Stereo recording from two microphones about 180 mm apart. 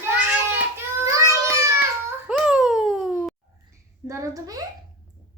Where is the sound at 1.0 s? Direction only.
15° right (ahead or behind).